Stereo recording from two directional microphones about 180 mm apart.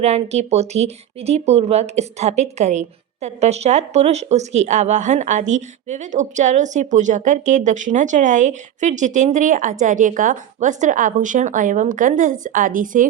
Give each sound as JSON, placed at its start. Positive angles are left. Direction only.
{"t": 0.0, "sound": "speech", "side_deg": -35}